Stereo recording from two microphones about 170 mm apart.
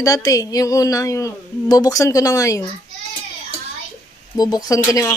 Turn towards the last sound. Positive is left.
turn(degrees=20)  # may be behind; listen again after turning